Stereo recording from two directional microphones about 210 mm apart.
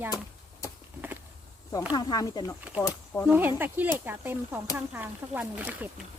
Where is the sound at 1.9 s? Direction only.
20° left (ahead or behind).